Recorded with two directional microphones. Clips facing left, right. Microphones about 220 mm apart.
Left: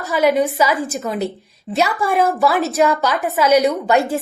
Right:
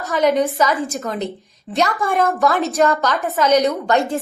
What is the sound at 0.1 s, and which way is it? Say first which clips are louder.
A woman's voice: left 1 dB; 5° left (ahead or behind).